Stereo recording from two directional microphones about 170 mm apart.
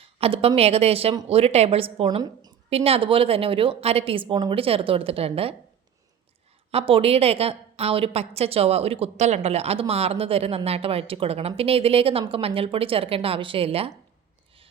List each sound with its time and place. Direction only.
0.0 s a woman's voice: 35° right (ahead or behind)
2.6 s a woman's voice: 35° right (ahead or behind)
6.7 s a woman's voice: 35° right (ahead or behind)